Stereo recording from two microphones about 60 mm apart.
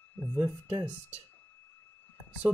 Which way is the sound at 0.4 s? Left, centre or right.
Right.